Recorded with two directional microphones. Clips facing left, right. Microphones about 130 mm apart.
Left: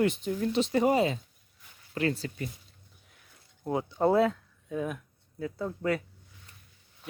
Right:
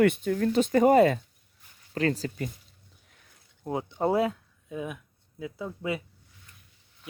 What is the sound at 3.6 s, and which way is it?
Speech, 20° right (ahead or behind).